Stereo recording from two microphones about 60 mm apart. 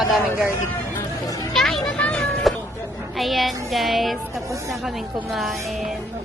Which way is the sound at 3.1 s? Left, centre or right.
Centre.